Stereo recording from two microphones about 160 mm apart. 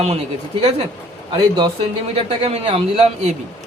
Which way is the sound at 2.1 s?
40° right (ahead or behind).